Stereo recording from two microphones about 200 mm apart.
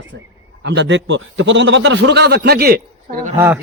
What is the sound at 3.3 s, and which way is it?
Speech, 10° right (ahead or behind).